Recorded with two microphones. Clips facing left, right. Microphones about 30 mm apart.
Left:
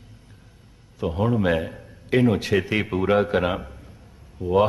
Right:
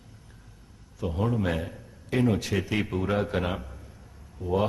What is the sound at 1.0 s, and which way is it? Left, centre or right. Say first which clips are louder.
A man's voice: left 6 dB; left.